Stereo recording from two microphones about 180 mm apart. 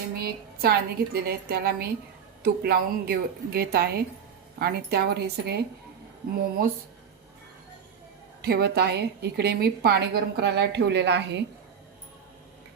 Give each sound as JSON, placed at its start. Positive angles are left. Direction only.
{"t": 0.2, "sound": "a woman's voice", "side_deg": -60}
{"t": 8.4, "sound": "a woman's voice", "side_deg": -60}